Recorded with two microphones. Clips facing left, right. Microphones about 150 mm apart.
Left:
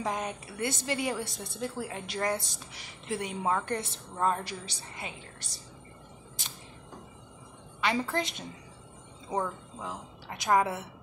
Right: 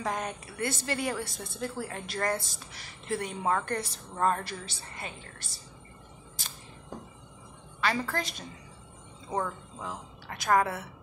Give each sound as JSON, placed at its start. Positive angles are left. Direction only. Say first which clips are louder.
{"t": 0.0, "sound": "a woman's voice", "louder": "even", "side_deg": 15}
{"t": 7.8, "sound": "a woman's voice", "louder": "left 1 dB", "side_deg": 20}